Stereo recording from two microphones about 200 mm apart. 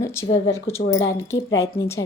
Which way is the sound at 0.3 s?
25° left (ahead or behind).